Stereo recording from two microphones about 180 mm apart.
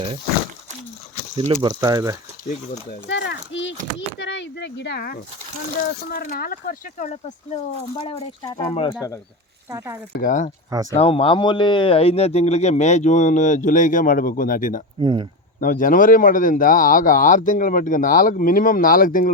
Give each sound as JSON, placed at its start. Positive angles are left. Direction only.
{"t": 1.6, "sound": "speech", "side_deg": -20}
{"t": 3.1, "sound": "a sound", "side_deg": 80}
{"t": 5.8, "sound": "speech", "side_deg": 55}
{"t": 8.4, "sound": "speech", "side_deg": 20}
{"t": 9.7, "sound": "speech", "side_deg": -15}
{"t": 10.1, "sound": "speech", "side_deg": 50}
{"t": 10.9, "sound": "speech", "side_deg": 30}
{"t": 15.0, "sound": "speech", "side_deg": -25}
{"t": 15.6, "sound": "speech", "side_deg": 50}